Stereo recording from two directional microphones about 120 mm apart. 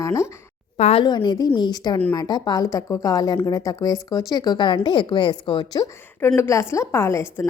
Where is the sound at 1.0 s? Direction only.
35° left (ahead or behind).